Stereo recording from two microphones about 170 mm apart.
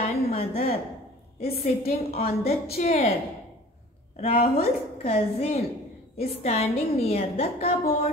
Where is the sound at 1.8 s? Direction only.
60° left (ahead or behind).